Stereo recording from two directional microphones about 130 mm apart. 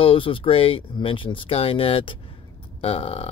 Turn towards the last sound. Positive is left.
turn(degrees=50)  # may be behind; listen again after turning